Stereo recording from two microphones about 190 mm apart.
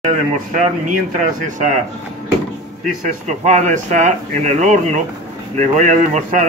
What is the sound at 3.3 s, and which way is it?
Speech, 40° right (ahead or behind).